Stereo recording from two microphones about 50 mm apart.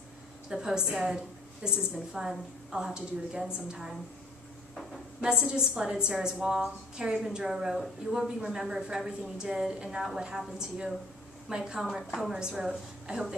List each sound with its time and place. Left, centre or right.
0.5 s a woman's voice: centre
5.2 s a woman's voice: centre
11.8 s a woman's voice: centre
12.4 s a woman's voice: centre